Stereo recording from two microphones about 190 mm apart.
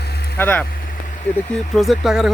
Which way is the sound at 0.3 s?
10° left (ahead or behind).